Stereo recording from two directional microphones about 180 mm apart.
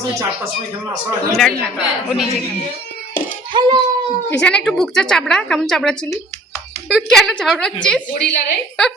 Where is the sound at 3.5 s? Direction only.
25° right (ahead or behind).